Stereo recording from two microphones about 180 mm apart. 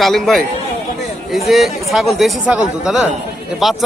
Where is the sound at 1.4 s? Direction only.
Centre (ahead or behind).